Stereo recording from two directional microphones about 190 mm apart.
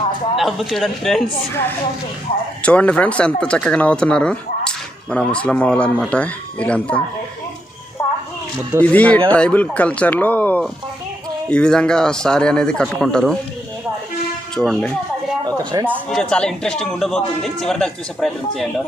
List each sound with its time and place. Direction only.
0.4 s a man's voice: centre (ahead or behind)
2.6 s speech: 5° left (ahead or behind)
8.8 s a man's voice: 5° left (ahead or behind)
14.5 s a man's voice: 5° left (ahead or behind)
15.4 s speech: 20° right (ahead or behind)
16.1 s a man's voice: 5° left (ahead or behind)